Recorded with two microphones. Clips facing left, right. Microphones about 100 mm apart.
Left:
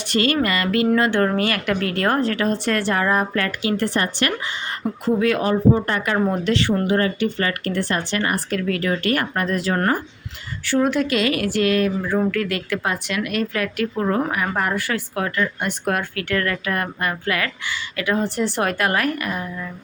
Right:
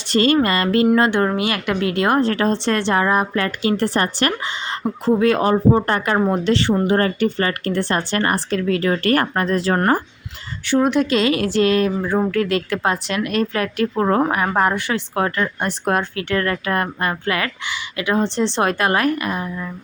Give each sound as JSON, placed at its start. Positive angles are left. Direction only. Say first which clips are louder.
{"t": 0.1, "sound": "speech", "louder": "right 4 dB", "side_deg": -30}
{"t": 1.1, "sound": "a woman's voice", "louder": "even", "side_deg": -15}
{"t": 3.4, "sound": "speech", "louder": "right 3 dB", "side_deg": -35}
{"t": 6.2, "sound": "a woman's voice", "louder": "right 2 dB", "side_deg": -25}
{"t": 6.8, "sound": "speech", "louder": "right 2 dB", "side_deg": -40}
{"t": 8.1, "sound": "speech", "louder": "right 3 dB", "side_deg": -40}
{"t": 8.4, "sound": "speech", "louder": "right 3 dB", "side_deg": -25}
{"t": 10.7, "sound": "a woman's voice", "louder": "right 2 dB", "side_deg": -20}
{"t": 13.9, "sound": "a woman's voice", "louder": "right 5 dB", "side_deg": -45}